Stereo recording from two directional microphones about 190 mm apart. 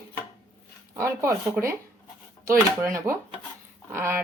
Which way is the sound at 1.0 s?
15° right (ahead or behind).